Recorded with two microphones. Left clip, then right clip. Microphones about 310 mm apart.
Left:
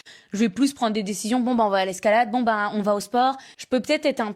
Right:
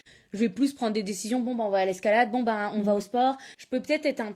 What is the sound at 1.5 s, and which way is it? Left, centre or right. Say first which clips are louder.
Speech: left 5 dB; left.